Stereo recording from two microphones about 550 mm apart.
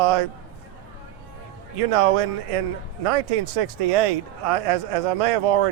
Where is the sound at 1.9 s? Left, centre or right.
Right.